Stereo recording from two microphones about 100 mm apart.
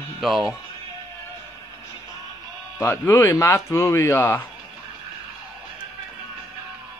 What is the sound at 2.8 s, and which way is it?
Speech, 25° left (ahead or behind).